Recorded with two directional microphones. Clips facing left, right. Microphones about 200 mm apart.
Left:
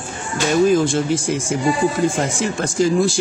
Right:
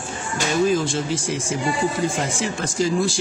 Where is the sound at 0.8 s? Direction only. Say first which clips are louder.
Left 5 dB; 50° left (ahead or behind).